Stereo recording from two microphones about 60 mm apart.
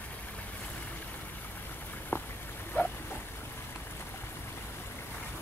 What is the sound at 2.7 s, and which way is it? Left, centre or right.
Boat, left.